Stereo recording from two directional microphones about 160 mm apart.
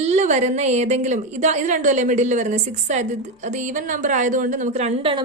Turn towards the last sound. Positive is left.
turn(degrees=-40)  # may be behind; listen again after turning